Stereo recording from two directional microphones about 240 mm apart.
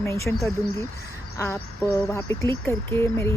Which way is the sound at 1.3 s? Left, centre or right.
Centre.